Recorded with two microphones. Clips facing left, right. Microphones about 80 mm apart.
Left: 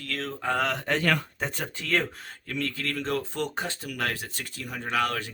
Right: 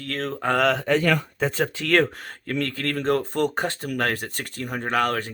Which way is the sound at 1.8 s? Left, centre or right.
Right.